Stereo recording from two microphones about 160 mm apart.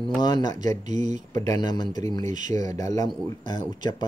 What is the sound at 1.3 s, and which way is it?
Speech, 20° left (ahead or behind).